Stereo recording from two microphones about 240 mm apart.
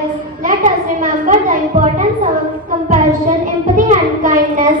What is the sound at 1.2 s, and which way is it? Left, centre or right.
Speech, right.